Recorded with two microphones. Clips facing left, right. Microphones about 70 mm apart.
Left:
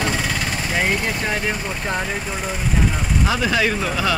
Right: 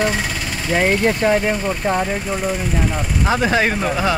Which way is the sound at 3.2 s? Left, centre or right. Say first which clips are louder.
Right 3 dB; right.